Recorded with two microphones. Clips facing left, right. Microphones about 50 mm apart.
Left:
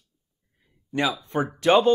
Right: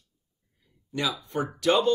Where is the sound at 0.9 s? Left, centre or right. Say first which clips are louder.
Left 4 dB; left.